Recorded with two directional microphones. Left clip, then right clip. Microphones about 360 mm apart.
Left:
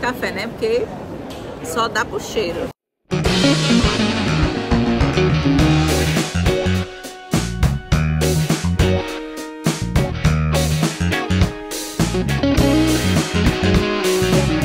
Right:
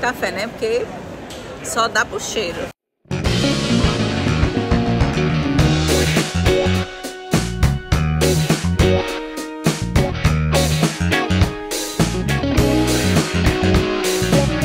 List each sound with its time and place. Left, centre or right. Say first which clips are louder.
0.0 s speech: right 1 dB; centre
3.1 s music: left 3 dB; centre